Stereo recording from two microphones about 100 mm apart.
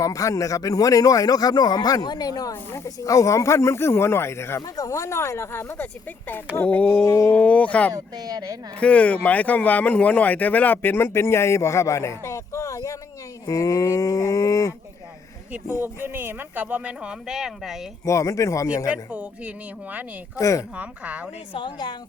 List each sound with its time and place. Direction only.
0.0 s speech: 35° left (ahead or behind); by 7.0 s 15° left (ahead or behind)
7.0 s speech: 30° left (ahead or behind)
7.3 s speech: 15° left (ahead or behind)
7.9 s speech: 40° right (ahead or behind)
8.8 s speech: 15° left (ahead or behind); by 14.8 s 35° left (ahead or behind)
15.8 s speech: 20° right (ahead or behind); by 17.7 s 5° right (ahead or behind)
18.0 s speech: 30° left (ahead or behind)
18.9 s speech: 15° right (ahead or behind)
20.3 s speech: 35° left (ahead or behind)
20.7 s speech: 15° right (ahead or behind)
21.5 s speech: 50° left (ahead or behind)